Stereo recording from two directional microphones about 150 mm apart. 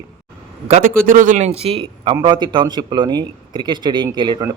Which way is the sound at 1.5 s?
40° right (ahead or behind).